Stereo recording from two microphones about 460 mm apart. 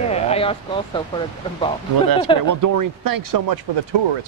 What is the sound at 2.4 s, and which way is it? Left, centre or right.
Speech, right.